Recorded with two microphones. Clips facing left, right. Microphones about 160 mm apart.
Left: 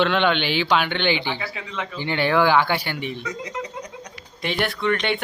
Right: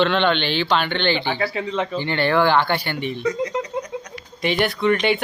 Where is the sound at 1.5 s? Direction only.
30° right (ahead or behind).